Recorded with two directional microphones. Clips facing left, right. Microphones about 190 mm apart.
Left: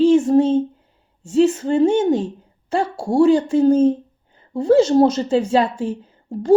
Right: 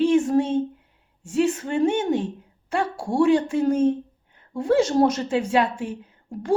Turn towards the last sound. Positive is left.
turn(degrees=25)  # may be behind; listen again after turning